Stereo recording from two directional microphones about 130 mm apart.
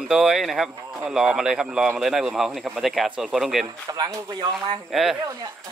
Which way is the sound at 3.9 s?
30° right (ahead or behind).